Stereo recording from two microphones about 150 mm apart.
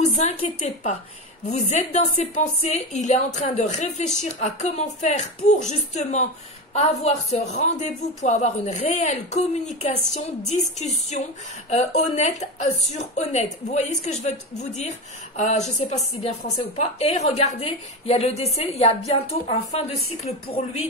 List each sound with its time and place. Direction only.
0.2 s speech: 50° left (ahead or behind)